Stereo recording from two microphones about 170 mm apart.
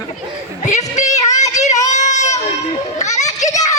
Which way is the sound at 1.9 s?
45° left (ahead or behind).